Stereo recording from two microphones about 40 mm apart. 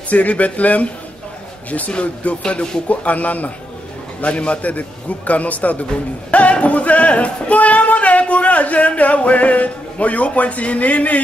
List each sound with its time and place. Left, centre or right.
0.1 s a man's voice: left
1.9 s speech: left
2.9 s a man's voice: left
6.3 s a sound: left